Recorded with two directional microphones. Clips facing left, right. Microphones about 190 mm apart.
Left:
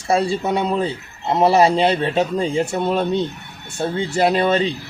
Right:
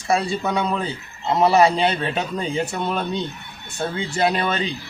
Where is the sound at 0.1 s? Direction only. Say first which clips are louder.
Left 3 dB; 30° left (ahead or behind).